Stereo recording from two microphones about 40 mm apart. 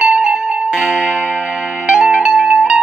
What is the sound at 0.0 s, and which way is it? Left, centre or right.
Music, right.